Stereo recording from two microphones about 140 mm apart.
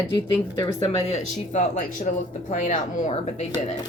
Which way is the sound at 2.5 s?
65° left (ahead or behind).